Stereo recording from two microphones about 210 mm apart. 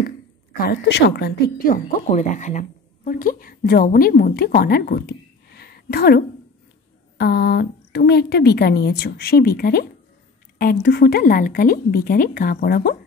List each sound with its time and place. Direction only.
0.6 s a woman's voice: 50° left (ahead or behind)
2.0 s a woman's voice: 35° left (ahead or behind)